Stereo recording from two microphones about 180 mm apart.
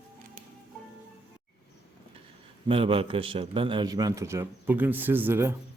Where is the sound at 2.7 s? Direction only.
30° right (ahead or behind).